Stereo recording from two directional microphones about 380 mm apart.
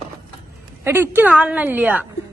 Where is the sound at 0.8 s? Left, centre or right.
Centre.